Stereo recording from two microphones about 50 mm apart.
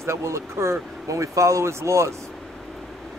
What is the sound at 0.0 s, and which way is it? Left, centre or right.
Speech, right.